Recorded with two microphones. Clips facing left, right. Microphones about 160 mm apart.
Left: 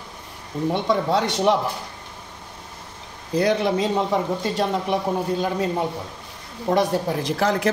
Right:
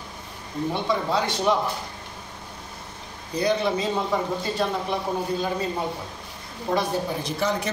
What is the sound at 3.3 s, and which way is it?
Speech, 90° left.